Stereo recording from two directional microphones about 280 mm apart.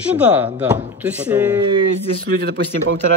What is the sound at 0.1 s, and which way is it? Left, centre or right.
Speech, centre.